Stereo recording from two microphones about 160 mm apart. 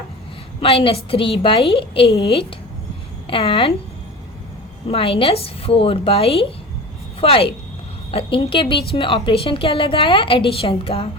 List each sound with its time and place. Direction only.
0.6 s a woman's voice: 35° left (ahead or behind)
4.9 s a woman's voice: 35° left (ahead or behind)